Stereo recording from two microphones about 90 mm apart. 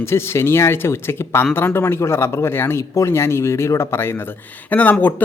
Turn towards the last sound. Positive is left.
turn(degrees=20)  # may be behind; listen again after turning